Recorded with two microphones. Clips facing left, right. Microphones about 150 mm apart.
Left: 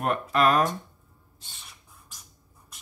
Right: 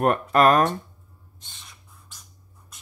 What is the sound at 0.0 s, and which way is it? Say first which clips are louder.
Speech: right 5 dB; 50° right (ahead or behind).